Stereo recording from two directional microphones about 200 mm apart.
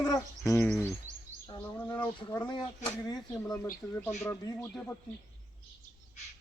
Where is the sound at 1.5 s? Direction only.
10° left (ahead or behind).